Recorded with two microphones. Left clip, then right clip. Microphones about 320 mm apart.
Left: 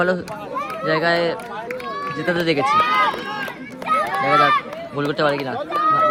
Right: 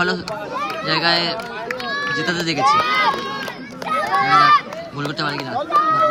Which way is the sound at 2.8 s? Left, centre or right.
Right.